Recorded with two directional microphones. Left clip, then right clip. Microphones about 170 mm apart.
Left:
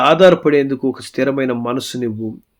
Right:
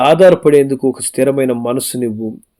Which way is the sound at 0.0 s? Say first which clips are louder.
Right 2 dB; 35° right (ahead or behind).